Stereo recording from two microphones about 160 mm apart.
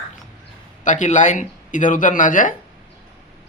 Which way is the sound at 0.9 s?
50° left (ahead or behind).